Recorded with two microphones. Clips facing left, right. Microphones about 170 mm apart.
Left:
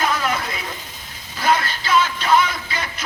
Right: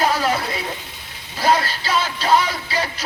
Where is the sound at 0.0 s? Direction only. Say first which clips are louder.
Right 3 dB; 35° right (ahead or behind).